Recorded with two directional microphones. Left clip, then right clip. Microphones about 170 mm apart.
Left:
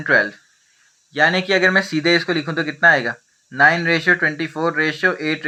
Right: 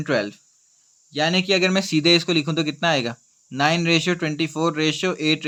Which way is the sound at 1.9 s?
90° right.